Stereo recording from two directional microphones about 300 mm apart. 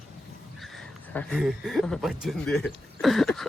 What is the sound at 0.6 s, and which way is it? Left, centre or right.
Speech, centre.